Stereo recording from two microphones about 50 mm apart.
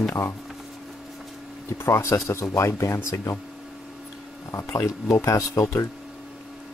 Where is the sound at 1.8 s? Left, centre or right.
Left.